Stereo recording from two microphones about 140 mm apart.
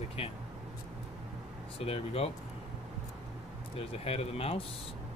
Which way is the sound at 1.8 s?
45° left (ahead or behind).